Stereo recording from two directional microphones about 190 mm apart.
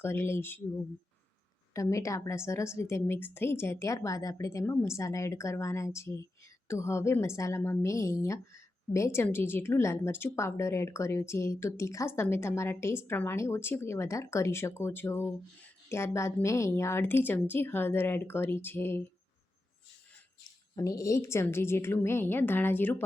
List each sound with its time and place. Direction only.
0.0 s a woman's voice: 10° left (ahead or behind)
1.7 s a woman's voice: 15° left (ahead or behind)
20.7 s a woman's voice: 15° left (ahead or behind)